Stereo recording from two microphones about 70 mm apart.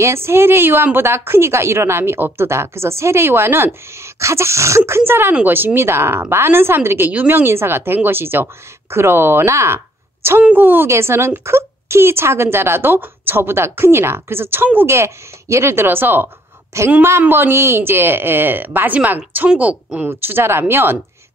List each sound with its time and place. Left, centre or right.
0.0 s a woman's voice: right
10.4 s a woman's voice: right
15.0 s a woman's voice: right
16.7 s a woman's voice: right; by 20.1 s centre
20.1 s a woman's voice: right